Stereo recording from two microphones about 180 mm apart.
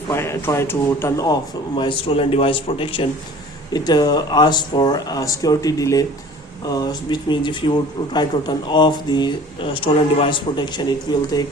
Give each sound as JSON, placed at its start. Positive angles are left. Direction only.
{"t": 0.1, "sound": "speech", "side_deg": 15}